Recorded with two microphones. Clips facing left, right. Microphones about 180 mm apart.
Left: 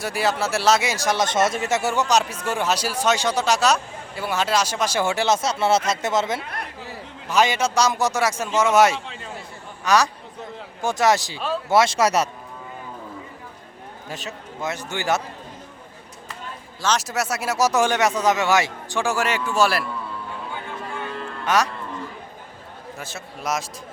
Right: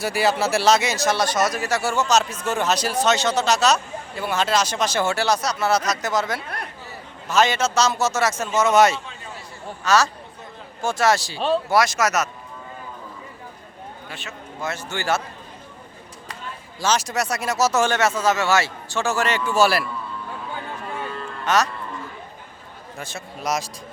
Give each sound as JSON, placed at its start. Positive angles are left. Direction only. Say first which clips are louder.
{"t": 0.0, "sound": "speech", "louder": "right 2 dB", "side_deg": 0}
{"t": 7.3, "sound": "speech", "louder": "even", "side_deg": 10}
{"t": 11.3, "sound": "speech", "louder": "right 5 dB", "side_deg": -30}
{"t": 11.7, "sound": "speech", "louder": "left 7 dB", "side_deg": 25}
{"t": 14.1, "sound": "a man's voice", "louder": "left 7 dB", "side_deg": 40}
{"t": 14.6, "sound": "speech", "louder": "left 1 dB", "side_deg": 15}
{"t": 16.8, "sound": "speech", "louder": "right 1 dB", "side_deg": 0}
{"t": 19.5, "sound": "a man's voice", "louder": "right 3 dB", "side_deg": 0}
{"t": 21.4, "sound": "speech", "louder": "even", "side_deg": 10}
{"t": 23.0, "sound": "a man's voice", "louder": "right 3 dB", "side_deg": 5}